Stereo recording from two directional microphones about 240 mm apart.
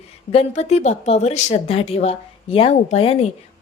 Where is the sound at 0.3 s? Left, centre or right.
Left.